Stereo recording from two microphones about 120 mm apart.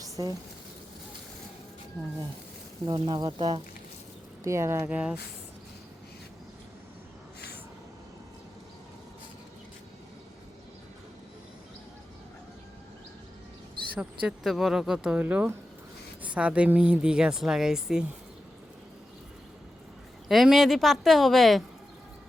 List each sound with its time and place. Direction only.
0.0 s a sound: 30° right (ahead or behind)
2.8 s speech: 35° right (ahead or behind)
4.4 s speech: 25° right (ahead or behind)
4.9 s a woman's voice: 10° right (ahead or behind)
13.9 s a woman's voice: 5° right (ahead or behind)
20.2 s a woman's voice: centre (ahead or behind)